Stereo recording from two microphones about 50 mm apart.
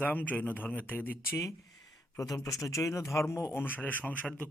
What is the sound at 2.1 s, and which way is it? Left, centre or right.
Speech, left.